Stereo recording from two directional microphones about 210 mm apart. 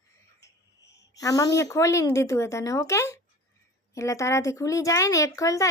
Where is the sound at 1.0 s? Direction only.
15° left (ahead or behind).